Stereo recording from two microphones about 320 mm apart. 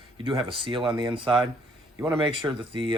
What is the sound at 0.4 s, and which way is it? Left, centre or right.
Speech, centre.